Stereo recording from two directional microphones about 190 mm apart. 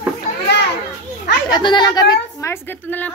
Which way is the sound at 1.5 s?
25° left (ahead or behind).